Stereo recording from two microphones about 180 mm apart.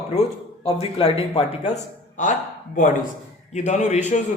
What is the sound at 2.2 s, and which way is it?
Speech, 45° left (ahead or behind).